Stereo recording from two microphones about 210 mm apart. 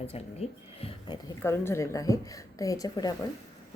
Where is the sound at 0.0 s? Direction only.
30° left (ahead or behind).